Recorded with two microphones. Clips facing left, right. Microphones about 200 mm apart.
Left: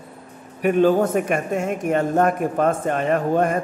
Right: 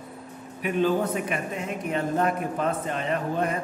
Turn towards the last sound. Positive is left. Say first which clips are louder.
# left 7 dB
turn(degrees=50)  # may be behind; listen again after turning